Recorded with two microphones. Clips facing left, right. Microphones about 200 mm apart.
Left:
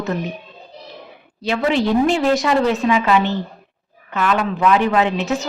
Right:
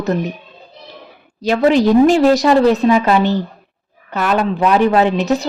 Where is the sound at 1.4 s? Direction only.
40° right (ahead or behind).